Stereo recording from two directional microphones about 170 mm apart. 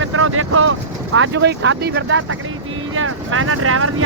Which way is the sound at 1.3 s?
90° right.